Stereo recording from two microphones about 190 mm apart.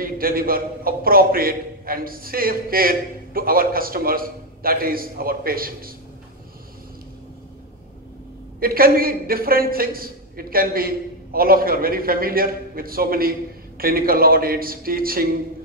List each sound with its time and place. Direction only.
0.0 s a man's voice: 50° right (ahead or behind)
8.5 s a man's voice: 50° right (ahead or behind)